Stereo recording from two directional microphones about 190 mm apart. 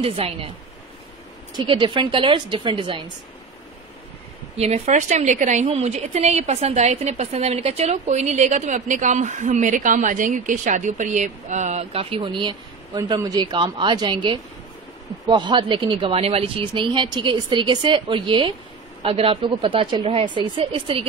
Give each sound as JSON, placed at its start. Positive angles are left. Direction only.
{"t": 0.0, "sound": "a woman's voice", "side_deg": -30}
{"t": 1.6, "sound": "speech", "side_deg": -25}
{"t": 4.6, "sound": "a woman's voice", "side_deg": -35}